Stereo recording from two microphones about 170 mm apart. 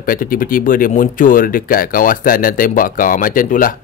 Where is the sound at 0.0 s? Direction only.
55° left (ahead or behind).